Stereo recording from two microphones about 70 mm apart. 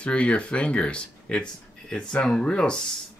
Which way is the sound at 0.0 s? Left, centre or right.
Centre.